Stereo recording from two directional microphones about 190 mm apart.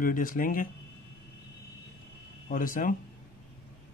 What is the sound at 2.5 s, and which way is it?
Speech, 45° left (ahead or behind).